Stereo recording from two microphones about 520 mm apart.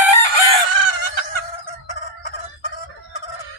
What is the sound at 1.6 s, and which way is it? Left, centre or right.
Chicken, left.